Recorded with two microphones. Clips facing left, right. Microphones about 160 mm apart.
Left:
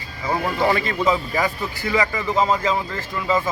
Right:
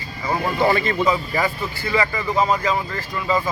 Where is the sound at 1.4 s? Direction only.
20° left (ahead or behind).